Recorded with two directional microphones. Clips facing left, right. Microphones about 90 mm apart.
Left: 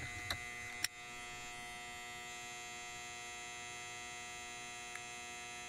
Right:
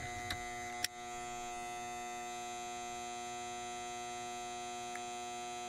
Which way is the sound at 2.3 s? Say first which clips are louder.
Right 8 dB; 35° right (ahead or behind).